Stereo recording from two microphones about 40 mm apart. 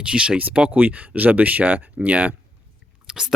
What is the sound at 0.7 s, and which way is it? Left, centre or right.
Speech, right.